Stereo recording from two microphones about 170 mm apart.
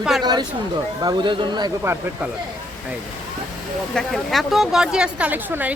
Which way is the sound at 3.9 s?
Centre (ahead or behind).